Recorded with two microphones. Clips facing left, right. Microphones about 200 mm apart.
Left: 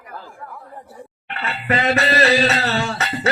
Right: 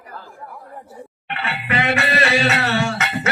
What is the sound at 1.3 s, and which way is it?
Music, 40° left (ahead or behind).